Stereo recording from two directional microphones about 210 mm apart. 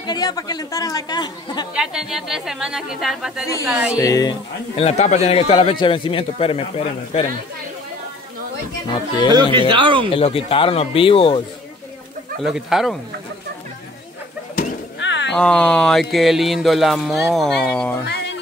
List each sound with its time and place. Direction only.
0.0 s speech: 20° left (ahead or behind)
1.7 s speech: 5° right (ahead or behind)
3.9 s speech: 15° left (ahead or behind)
4.7 s speech: 30° left (ahead or behind)
8.9 s speech: 20° left (ahead or behind)
9.3 s speech: 20° right (ahead or behind)
10.1 s speech: 25° left (ahead or behind)
12.4 s speech: centre (ahead or behind)
15.0 s wild animals: 60° left (ahead or behind)
15.3 s speech: 5° left (ahead or behind)
18.0 s a sound: 55° left (ahead or behind)